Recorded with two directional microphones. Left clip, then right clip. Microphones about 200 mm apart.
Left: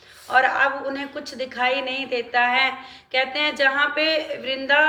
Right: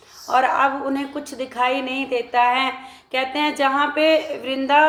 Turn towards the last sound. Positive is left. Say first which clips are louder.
# right 2 dB
turn(degrees=-50)  # may be behind; listen again after turning